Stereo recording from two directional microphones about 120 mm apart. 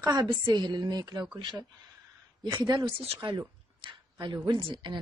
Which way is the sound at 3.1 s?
40° right (ahead or behind).